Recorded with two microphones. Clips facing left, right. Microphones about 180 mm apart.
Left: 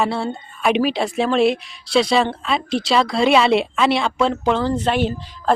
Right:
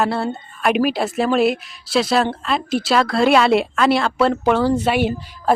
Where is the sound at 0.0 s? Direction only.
Centre (ahead or behind).